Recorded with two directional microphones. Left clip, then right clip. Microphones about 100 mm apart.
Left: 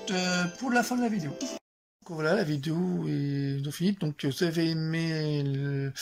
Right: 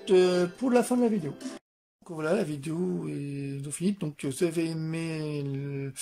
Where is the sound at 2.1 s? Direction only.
20° right (ahead or behind).